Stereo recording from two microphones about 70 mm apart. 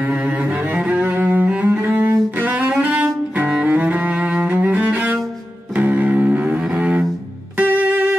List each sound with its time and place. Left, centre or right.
0.0 s cello: centre
5.8 s music: right